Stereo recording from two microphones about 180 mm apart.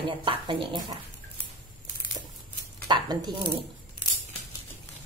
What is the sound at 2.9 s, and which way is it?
Speech, 25° right (ahead or behind).